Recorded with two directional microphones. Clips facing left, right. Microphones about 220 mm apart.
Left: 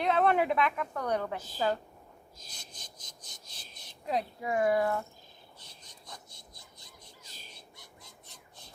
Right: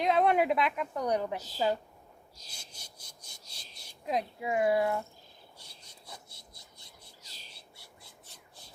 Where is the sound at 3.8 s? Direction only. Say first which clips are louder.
Even; 10° right (ahead or behind).